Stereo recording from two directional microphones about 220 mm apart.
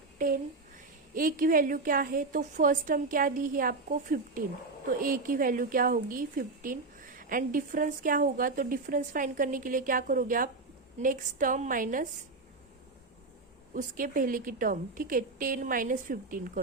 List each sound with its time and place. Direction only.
0.2 s a sound: 35° right (ahead or behind)
1.1 s a woman's voice: 40° right (ahead or behind)
13.7 s a woman's voice: 40° right (ahead or behind)